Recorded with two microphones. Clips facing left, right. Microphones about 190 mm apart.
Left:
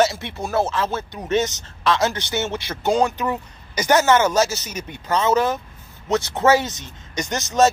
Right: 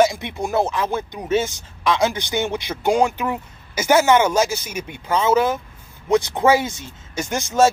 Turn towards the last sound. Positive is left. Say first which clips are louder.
# right 1 dB
turn(degrees=-10)  # may be behind; listen again after turning